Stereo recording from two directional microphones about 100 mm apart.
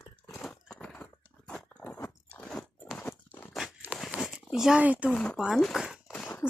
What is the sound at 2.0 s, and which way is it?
Biting, 10° left (ahead or behind).